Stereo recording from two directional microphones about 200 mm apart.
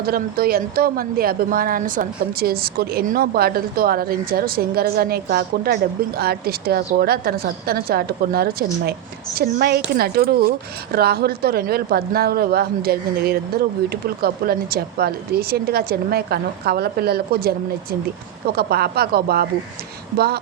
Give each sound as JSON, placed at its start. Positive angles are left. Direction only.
{"t": 0.0, "sound": "a woman's voice", "side_deg": -50}
{"t": 18.5, "sound": "a woman's voice", "side_deg": -50}